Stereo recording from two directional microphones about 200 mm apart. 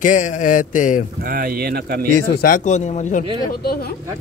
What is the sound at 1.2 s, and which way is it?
Speech, 45° right (ahead or behind).